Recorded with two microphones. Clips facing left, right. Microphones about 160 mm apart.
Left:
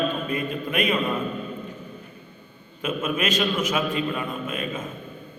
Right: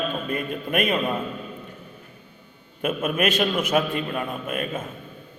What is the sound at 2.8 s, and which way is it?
A man's voice, 55° right (ahead or behind).